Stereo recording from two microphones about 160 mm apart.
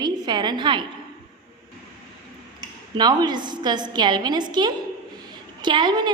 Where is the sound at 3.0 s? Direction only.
25° right (ahead or behind).